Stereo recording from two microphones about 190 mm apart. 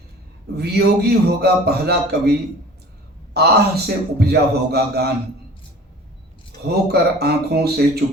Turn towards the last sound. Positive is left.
turn(degrees=-55)  # may be behind; listen again after turning